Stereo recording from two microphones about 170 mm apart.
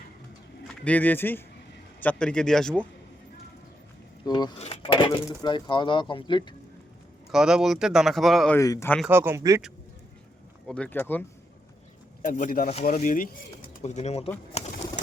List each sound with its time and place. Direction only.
0.8 s speech: 10° left (ahead or behind)
4.3 s speech: 25° left (ahead or behind)
4.6 s speech: 35° left (ahead or behind)
7.3 s speech: 5° right (ahead or behind)
8.5 s speech: 20° left (ahead or behind)
9.0 s speech: 15° right (ahead or behind)
10.7 s speech: 10° left (ahead or behind)
12.2 s speech: 50° left (ahead or behind)
14.6 s bird: 40° left (ahead or behind)